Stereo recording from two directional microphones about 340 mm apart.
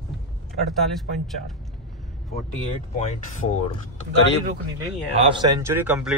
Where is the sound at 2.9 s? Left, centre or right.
Centre.